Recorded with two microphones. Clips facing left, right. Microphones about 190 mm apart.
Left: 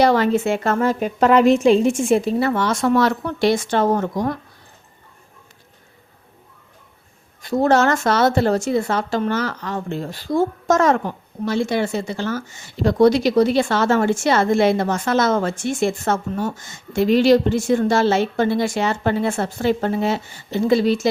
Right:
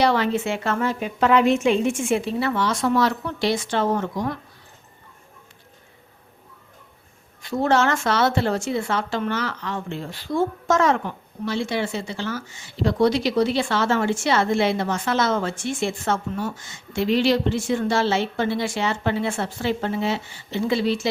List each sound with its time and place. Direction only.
0.0 s speech: 45° left (ahead or behind)
7.4 s speech: 40° left (ahead or behind)